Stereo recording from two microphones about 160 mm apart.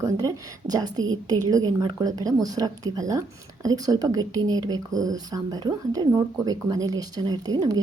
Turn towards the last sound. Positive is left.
turn(degrees=-25)  # may be behind; listen again after turning